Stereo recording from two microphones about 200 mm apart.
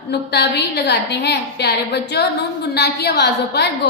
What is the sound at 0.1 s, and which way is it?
A woman's voice, 55° left (ahead or behind).